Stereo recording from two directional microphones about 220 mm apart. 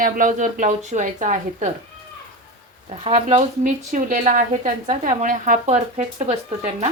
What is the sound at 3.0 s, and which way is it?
A woman's voice, 30° right (ahead or behind).